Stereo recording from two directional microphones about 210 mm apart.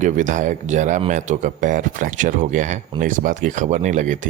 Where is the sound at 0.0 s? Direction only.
35° right (ahead or behind).